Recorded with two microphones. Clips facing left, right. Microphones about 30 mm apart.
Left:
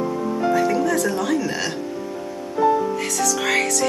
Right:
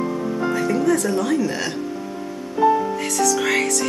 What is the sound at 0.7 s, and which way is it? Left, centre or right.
Speech, centre.